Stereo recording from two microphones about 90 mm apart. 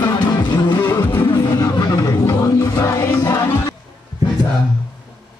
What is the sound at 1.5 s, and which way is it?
Music, 45° left (ahead or behind).